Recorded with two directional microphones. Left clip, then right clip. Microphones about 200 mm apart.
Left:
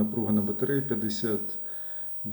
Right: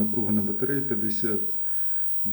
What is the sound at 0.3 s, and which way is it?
Speech, 5° left (ahead or behind).